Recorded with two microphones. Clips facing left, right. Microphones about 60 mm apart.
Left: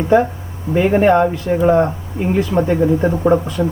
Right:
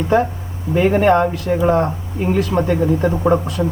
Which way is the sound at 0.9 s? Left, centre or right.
Centre.